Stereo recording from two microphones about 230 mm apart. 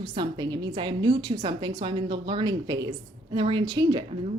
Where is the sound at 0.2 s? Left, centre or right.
Centre.